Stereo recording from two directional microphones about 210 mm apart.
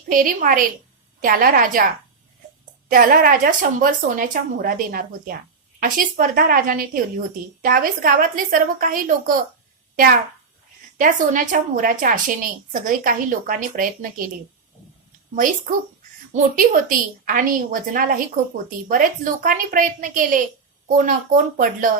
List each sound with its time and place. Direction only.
0.1 s a woman's voice: 40° right (ahead or behind)
2.9 s a woman's voice: 45° right (ahead or behind)
16.3 s a woman's voice: 40° right (ahead or behind)